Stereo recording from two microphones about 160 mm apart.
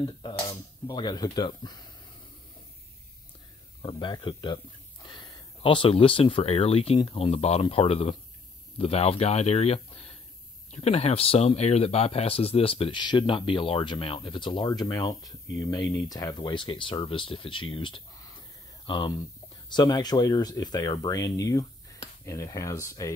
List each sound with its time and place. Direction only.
0.0 s speech: 25° left (ahead or behind)
3.8 s speech: 30° left (ahead or behind)